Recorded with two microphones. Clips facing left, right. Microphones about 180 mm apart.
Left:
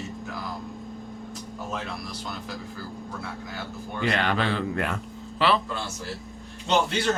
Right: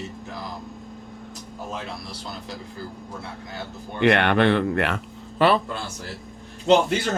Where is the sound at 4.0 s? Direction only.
65° right (ahead or behind).